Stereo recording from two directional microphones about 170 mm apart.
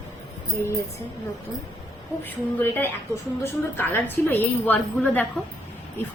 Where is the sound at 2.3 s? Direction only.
10° left (ahead or behind).